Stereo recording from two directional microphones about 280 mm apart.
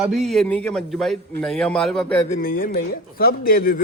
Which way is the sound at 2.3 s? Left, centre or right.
Left.